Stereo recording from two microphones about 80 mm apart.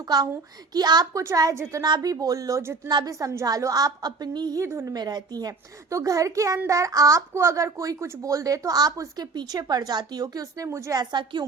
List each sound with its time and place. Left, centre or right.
0.0 s a child's voice: right
1.1 s speech: right
4.6 s speech: right
4.9 s speech: right
10.2 s speech: right
10.9 s a woman's voice: right